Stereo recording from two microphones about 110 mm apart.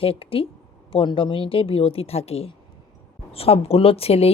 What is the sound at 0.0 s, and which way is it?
Speech, 60° left (ahead or behind).